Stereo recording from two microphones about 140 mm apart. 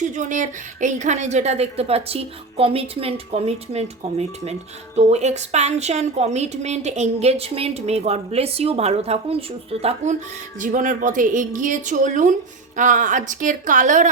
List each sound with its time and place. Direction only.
0.1 s speech: 60° right (ahead or behind)
10.6 s a woman's voice: 65° right (ahead or behind)